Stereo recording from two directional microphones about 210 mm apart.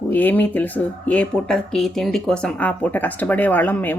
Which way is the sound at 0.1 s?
10° left (ahead or behind).